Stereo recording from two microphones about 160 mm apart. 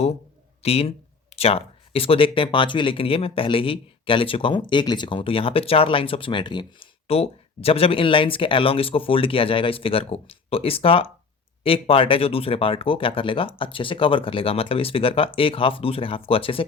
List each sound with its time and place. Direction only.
0.6 s speech: 40° left (ahead or behind)